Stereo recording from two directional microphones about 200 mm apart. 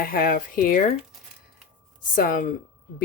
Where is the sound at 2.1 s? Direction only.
45° left (ahead or behind).